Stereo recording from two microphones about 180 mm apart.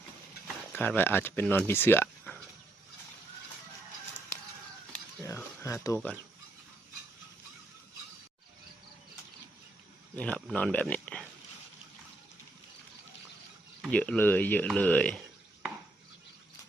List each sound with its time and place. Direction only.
0.4 s speech: 10° left (ahead or behind)
5.2 s a sound: 15° left (ahead or behind)
10.2 s speech: 5° left (ahead or behind)
13.8 s speech: 5° left (ahead or behind)